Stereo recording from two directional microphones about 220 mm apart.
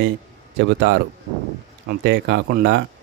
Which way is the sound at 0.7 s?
55° right (ahead or behind).